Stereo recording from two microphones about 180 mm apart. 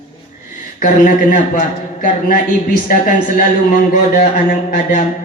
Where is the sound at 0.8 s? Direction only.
45° left (ahead or behind).